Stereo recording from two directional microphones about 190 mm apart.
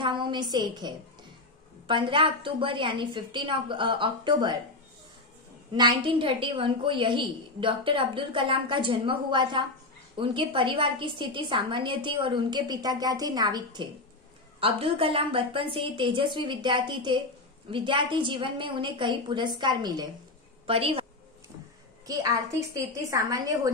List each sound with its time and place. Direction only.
0.0 s a woman's voice: 25° right (ahead or behind)
1.9 s a woman's voice: 25° right (ahead or behind)
5.8 s a woman's voice: 25° right (ahead or behind)
22.0 s a woman's voice: 20° right (ahead or behind)